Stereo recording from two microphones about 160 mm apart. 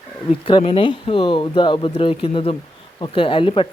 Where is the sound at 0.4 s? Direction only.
35° left (ahead or behind).